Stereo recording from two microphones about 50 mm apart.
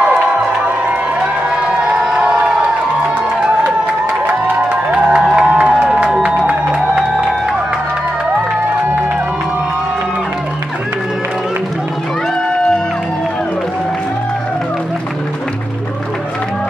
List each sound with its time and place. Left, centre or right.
1.6 s crowd: centre
4.3 s music: right
5.5 s a sound: right
6.2 s music: right